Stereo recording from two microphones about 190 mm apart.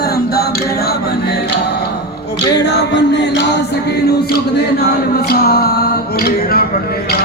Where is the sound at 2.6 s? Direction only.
65° left (ahead or behind).